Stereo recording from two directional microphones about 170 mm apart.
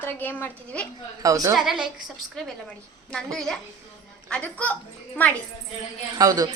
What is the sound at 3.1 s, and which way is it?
A woman's voice, 5° left (ahead or behind).